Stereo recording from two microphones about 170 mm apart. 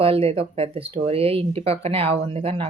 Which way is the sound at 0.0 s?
35° right (ahead or behind).